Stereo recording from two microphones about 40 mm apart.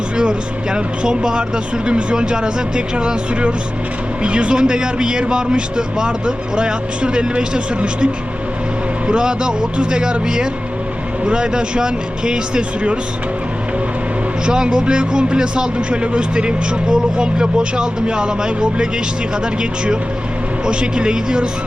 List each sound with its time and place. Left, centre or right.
0.2 s a man's voice: right
14.4 s a man's voice: right
20.7 s a man's voice: right